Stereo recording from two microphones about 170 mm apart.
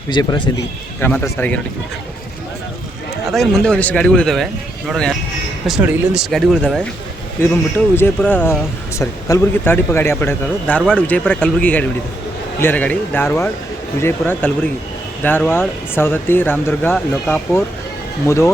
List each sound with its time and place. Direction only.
0.1 s a man's voice: 25° left (ahead or behind)
1.0 s speech: 10° left (ahead or behind)
3.2 s a man's voice: centre (ahead or behind)
7.4 s speech: 15° left (ahead or behind)